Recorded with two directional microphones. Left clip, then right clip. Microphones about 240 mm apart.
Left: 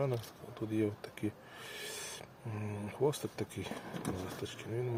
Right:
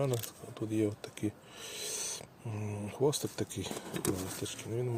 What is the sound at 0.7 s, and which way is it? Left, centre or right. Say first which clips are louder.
Speech: right 2 dB; right.